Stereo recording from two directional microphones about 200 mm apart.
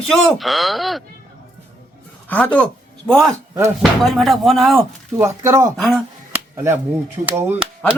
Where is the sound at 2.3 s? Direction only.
10° left (ahead or behind).